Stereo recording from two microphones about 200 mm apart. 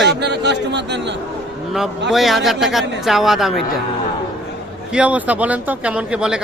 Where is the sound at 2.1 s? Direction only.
Centre (ahead or behind).